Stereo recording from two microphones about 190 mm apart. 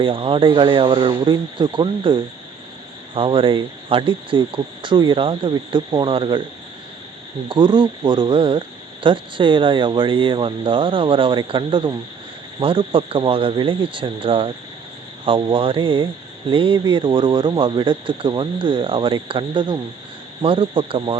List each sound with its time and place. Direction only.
0.0 s speech: 25° right (ahead or behind)
7.4 s speech: 25° right (ahead or behind)